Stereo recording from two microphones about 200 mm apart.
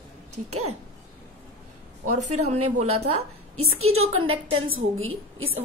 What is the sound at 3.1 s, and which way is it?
A woman's voice, 90° right.